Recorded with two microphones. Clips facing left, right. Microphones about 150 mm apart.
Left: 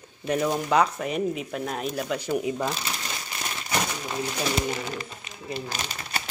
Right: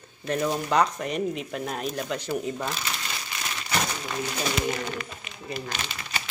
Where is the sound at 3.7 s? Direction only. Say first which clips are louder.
Even; 15° left (ahead or behind).